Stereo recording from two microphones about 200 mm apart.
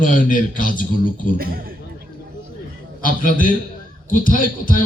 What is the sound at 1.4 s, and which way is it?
Speech, 45° right (ahead or behind).